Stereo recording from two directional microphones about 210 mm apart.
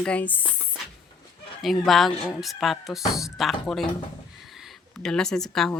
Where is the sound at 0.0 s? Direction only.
5° left (ahead or behind).